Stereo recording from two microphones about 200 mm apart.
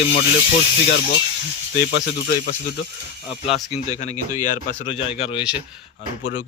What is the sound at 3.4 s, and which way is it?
Speech, 30° left (ahead or behind).